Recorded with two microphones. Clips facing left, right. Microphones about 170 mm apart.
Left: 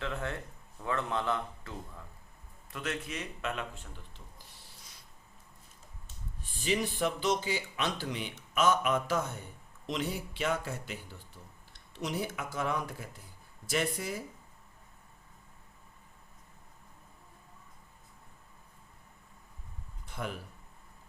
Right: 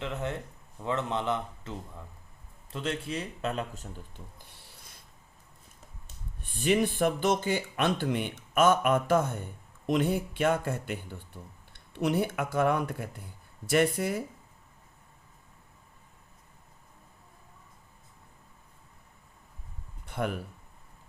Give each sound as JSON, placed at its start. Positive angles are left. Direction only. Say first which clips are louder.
{"t": 0.0, "sound": "a man's voice", "louder": "right 3 dB", "side_deg": -20}
{"t": 6.4, "sound": "speech", "louder": "right 6 dB", "side_deg": -60}
{"t": 20.1, "sound": "a sound", "louder": "right 7 dB", "side_deg": -60}